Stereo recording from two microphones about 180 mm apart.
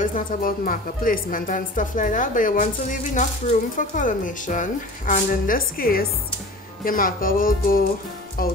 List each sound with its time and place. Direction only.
0.0 s a woman's voice: 45° left (ahead or behind)